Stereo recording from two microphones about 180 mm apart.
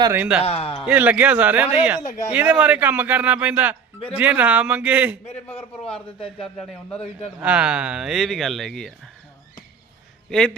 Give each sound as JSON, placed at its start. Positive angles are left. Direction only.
{"t": 0.0, "sound": "speech", "side_deg": -10}
{"t": 0.4, "sound": "a man's voice", "side_deg": 35}
{"t": 0.9, "sound": "speech", "side_deg": -10}
{"t": 2.0, "sound": "a man's voice", "side_deg": 40}
{"t": 2.3, "sound": "speech", "side_deg": -5}
{"t": 5.2, "sound": "a man's voice", "side_deg": 35}
{"t": 6.4, "sound": "speech", "side_deg": 5}
{"t": 10.2, "sound": "speech", "side_deg": 5}